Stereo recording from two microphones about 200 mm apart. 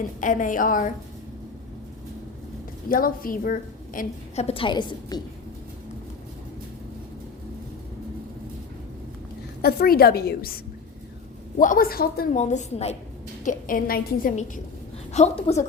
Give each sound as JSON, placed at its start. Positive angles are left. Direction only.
{"t": 0.2, "sound": "a woman's voice", "side_deg": 40}
{"t": 2.9, "sound": "a woman's voice", "side_deg": 45}
{"t": 4.4, "sound": "a woman's voice", "side_deg": 25}
{"t": 9.6, "sound": "a woman's voice", "side_deg": 50}
{"t": 11.5, "sound": "a woman's voice", "side_deg": 40}